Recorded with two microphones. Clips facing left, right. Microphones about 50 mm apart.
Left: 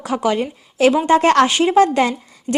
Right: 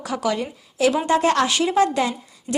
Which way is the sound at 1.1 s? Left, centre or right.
Left.